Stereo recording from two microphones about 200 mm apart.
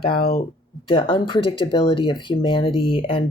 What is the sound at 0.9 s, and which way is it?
Speech, 25° left (ahead or behind).